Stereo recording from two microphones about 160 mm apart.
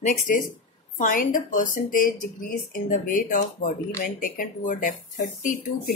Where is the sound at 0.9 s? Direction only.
60° left (ahead or behind).